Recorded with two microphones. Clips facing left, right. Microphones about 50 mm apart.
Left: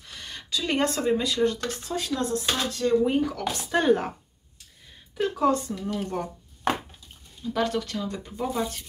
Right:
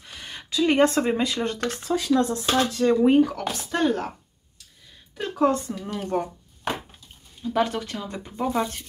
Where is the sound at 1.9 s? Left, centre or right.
Right.